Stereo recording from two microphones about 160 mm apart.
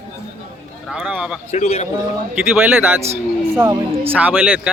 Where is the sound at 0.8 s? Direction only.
5° right (ahead or behind).